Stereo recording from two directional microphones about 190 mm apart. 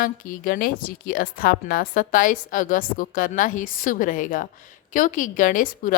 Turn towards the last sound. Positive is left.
turn(degrees=45)  # may be behind; listen again after turning